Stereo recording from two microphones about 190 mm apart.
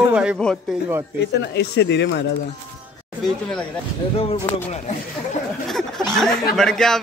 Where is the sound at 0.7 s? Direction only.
5° left (ahead or behind).